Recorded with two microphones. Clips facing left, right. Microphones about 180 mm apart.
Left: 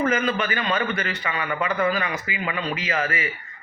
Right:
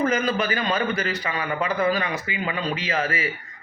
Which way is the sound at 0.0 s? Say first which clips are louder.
Even; 35° right (ahead or behind).